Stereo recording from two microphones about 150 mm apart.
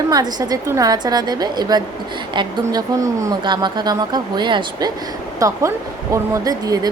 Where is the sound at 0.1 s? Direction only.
25° right (ahead or behind).